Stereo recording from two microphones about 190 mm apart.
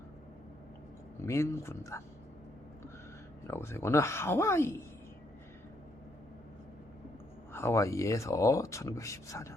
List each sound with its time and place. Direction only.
1.2 s speech: 15° left (ahead or behind)
3.4 s speech: 15° left (ahead or behind)
7.5 s speech: 15° left (ahead or behind)